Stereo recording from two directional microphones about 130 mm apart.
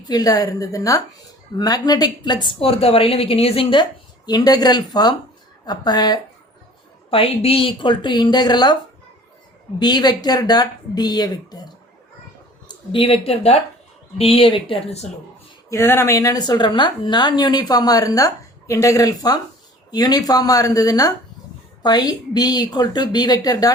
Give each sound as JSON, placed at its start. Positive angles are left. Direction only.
{"t": 0.1, "sound": "speech", "side_deg": 30}
{"t": 4.3, "sound": "speech", "side_deg": 30}
{"t": 7.1, "sound": "speech", "side_deg": 45}
{"t": 9.7, "sound": "speech", "side_deg": 35}
{"t": 12.6, "sound": "speech", "side_deg": 45}
{"t": 15.7, "sound": "speech", "side_deg": 20}